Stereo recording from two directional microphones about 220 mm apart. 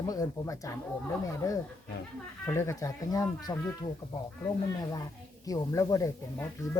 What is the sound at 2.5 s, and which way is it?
Speech, 10° left (ahead or behind).